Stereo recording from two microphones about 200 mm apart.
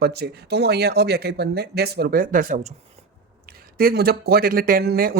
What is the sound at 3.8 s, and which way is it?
Speech, 50° right (ahead or behind).